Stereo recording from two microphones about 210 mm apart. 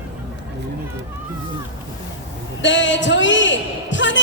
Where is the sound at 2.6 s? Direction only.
60° left (ahead or behind).